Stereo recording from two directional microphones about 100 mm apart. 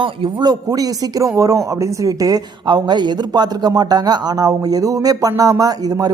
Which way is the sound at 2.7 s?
45° right (ahead or behind).